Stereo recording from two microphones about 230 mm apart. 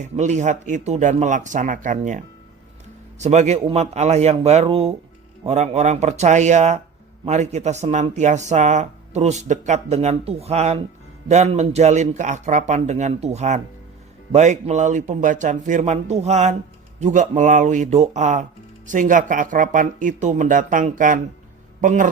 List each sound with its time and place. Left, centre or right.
0.0 s a man's voice: right